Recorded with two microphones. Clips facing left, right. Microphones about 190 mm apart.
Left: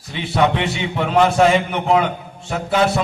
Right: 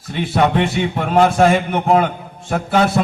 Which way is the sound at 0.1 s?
50° right (ahead or behind).